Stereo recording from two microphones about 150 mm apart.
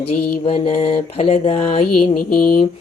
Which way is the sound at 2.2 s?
70° left (ahead or behind).